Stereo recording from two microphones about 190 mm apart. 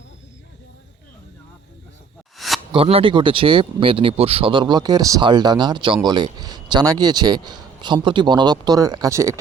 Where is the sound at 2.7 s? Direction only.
30° right (ahead or behind).